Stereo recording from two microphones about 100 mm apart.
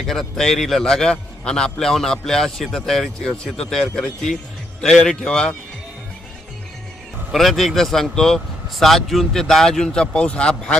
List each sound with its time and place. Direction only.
0.0 s a man's voice: 5° left (ahead or behind)
7.3 s a man's voice: centre (ahead or behind)